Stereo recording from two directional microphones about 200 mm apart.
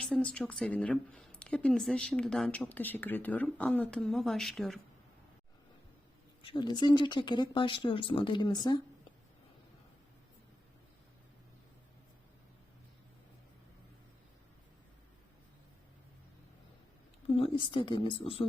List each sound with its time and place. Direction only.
0.0 s speech: 5° left (ahead or behind)
6.4 s speech: 25° left (ahead or behind)
17.2 s speech: 25° left (ahead or behind)